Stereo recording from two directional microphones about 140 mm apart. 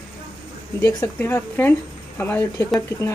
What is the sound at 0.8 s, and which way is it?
Speech, 15° left (ahead or behind).